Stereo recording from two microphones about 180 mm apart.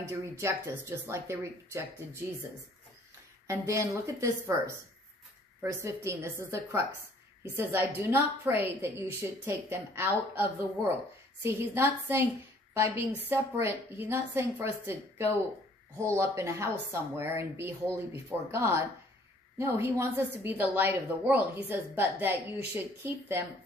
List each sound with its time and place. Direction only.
0.4 s a woman's voice: 15° right (ahead or behind)
3.4 s a woman's voice: 15° right (ahead or behind)